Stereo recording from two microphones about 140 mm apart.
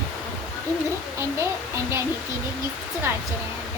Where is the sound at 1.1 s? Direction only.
20° right (ahead or behind).